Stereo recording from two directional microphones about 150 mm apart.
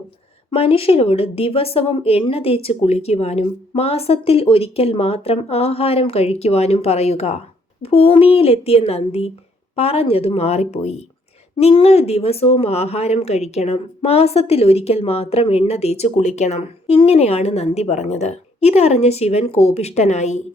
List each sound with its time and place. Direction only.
0.5 s speech: 40° left (ahead or behind)